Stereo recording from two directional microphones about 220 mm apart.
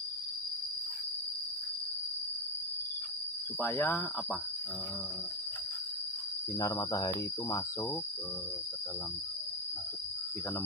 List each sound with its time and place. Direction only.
3.6 s speech: 10° left (ahead or behind)
6.6 s speech: 15° left (ahead or behind)